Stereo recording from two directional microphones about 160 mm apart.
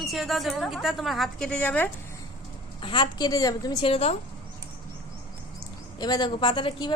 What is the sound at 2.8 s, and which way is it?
A woman's voice, 30° left (ahead or behind).